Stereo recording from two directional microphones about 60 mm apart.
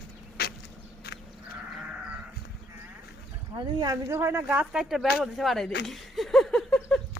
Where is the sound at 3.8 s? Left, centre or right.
Right.